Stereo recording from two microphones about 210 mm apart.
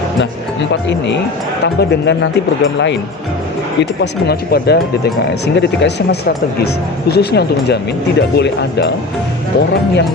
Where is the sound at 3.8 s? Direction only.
50° left (ahead or behind).